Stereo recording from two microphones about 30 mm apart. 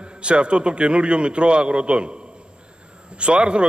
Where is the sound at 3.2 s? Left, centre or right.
Right.